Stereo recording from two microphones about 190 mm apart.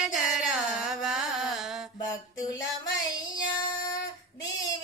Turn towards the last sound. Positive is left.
turn(degrees=20)  # may be behind; listen again after turning